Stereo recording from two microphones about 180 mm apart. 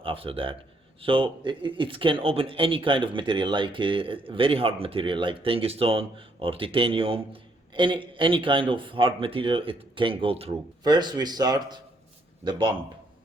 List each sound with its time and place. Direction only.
0.0 s speech: 30° right (ahead or behind)